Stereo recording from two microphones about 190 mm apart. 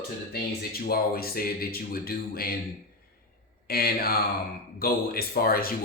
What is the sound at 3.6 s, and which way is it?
Speech, 55° left (ahead or behind).